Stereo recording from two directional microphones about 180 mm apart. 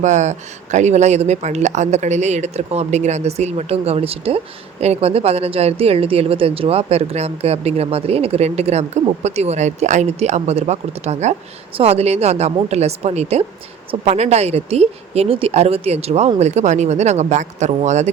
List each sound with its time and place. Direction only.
0.0 s speech: 40° right (ahead or behind)